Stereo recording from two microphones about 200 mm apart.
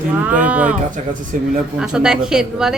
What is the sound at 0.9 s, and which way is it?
Speech, 40° right (ahead or behind).